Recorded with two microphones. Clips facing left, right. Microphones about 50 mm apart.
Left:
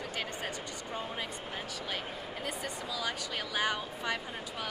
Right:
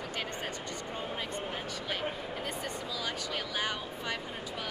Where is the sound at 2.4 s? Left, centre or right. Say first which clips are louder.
Left 2 dB; centre.